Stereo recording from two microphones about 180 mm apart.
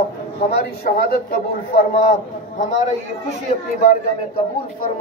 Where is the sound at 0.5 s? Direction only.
60° left (ahead or behind).